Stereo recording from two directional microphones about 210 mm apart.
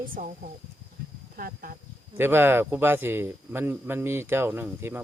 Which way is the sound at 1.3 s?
45° right (ahead or behind).